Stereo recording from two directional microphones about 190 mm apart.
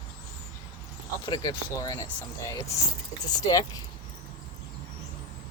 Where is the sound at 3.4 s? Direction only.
20° left (ahead or behind).